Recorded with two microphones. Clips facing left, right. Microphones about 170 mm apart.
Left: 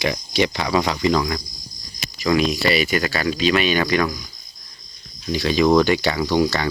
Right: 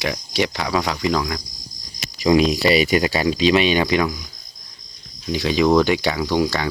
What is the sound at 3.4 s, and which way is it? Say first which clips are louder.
Speech: right 2 dB; 25° right (ahead or behind).